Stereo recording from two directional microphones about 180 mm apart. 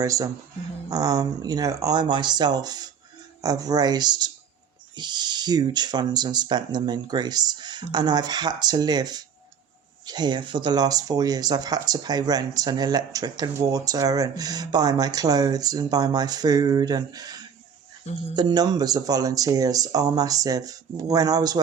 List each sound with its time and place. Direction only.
0.0 s speech: 20° right (ahead or behind)